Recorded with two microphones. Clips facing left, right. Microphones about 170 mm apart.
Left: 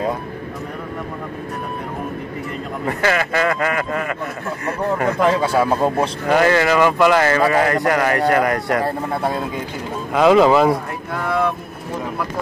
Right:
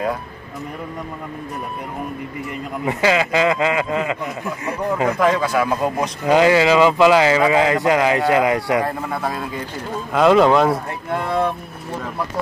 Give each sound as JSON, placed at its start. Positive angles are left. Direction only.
{"t": 2.8, "sound": "speech", "side_deg": -15}
{"t": 5.2, "sound": "a man's voice", "side_deg": 30}
{"t": 6.2, "sound": "speech", "side_deg": -10}
{"t": 8.8, "sound": "a man's voice", "side_deg": 25}
{"t": 10.1, "sound": "speech", "side_deg": 0}
{"t": 11.1, "sound": "speech", "side_deg": -25}